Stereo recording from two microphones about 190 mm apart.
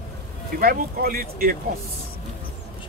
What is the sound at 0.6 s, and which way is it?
Speech, 50° right (ahead or behind).